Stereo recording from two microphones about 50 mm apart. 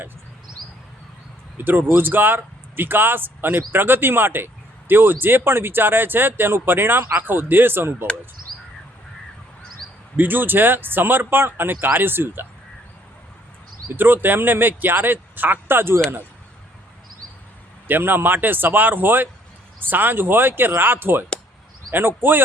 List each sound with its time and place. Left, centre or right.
1.5 s speech: right
10.2 s speech: right
13.9 s speech: right
17.8 s a man's voice: right